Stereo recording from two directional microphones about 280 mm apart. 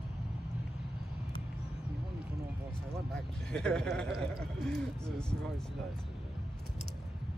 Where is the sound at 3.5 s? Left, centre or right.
Centre.